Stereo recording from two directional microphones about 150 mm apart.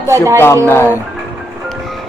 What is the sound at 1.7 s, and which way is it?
Music, centre (ahead or behind).